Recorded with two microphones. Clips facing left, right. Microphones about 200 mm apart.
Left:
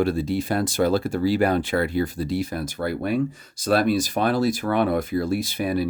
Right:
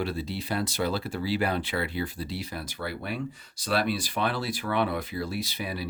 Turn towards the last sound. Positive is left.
turn(degrees=50)  # may be behind; listen again after turning